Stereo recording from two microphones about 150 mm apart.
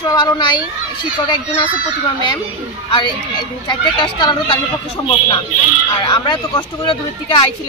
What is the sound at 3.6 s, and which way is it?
Speech, 30° left (ahead or behind).